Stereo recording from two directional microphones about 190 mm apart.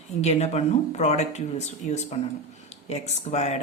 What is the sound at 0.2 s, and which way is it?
Speech, 35° left (ahead or behind).